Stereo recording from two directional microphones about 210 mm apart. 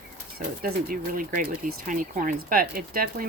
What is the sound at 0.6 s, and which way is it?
Speech, 40° right (ahead or behind).